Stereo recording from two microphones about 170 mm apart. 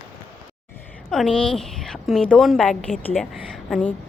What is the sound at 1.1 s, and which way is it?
A woman's voice, centre (ahead or behind).